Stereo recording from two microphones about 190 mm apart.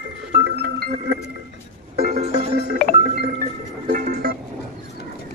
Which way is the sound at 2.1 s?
35° right (ahead or behind).